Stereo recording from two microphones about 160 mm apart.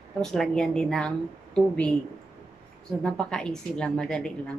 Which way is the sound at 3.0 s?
5° left (ahead or behind).